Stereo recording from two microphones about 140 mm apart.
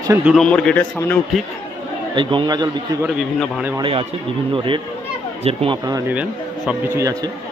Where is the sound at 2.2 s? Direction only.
35° right (ahead or behind).